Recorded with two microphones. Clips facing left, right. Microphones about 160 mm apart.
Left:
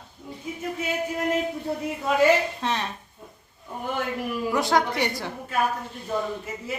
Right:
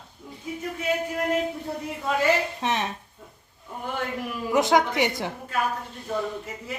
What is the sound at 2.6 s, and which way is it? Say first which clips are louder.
Speech: right 1 dB; 20° right (ahead or behind).